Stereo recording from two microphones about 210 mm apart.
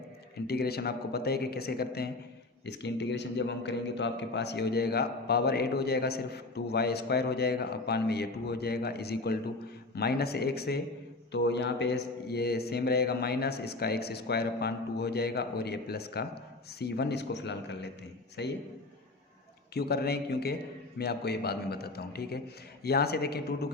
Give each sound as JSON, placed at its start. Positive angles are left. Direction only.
{"t": 0.3, "sound": "a man's voice", "side_deg": 50}
{"t": 19.7, "sound": "a man's voice", "side_deg": 50}